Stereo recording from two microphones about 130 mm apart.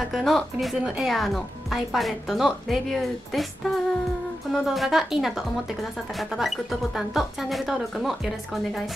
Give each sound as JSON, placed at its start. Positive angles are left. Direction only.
{"t": 0.1, "sound": "speech", "side_deg": 0}